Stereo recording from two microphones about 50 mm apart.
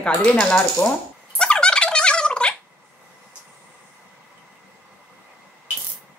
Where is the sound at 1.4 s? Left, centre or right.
Centre.